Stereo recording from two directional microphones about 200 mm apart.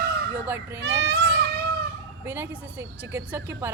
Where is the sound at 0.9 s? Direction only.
60° right (ahead or behind).